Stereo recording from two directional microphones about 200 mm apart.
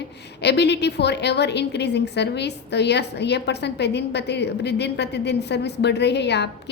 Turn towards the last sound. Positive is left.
turn(degrees=55)  # may be behind; listen again after turning